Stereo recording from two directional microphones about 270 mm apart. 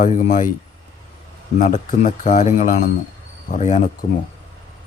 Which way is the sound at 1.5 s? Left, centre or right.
Left.